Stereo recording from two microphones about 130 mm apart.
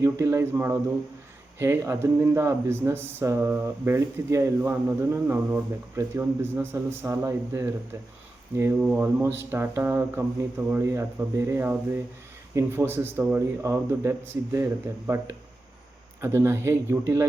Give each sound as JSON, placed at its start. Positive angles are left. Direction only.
{"t": 0.0, "sound": "speech", "side_deg": -20}
{"t": 8.8, "sound": "speech", "side_deg": -10}